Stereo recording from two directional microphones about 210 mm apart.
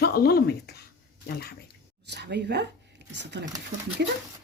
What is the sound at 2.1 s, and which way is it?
Speech, 55° right (ahead or behind).